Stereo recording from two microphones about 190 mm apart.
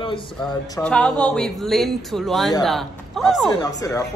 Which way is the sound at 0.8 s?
5° left (ahead or behind).